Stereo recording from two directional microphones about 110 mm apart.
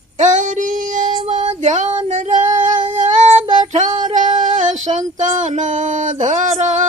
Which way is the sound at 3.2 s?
90° right.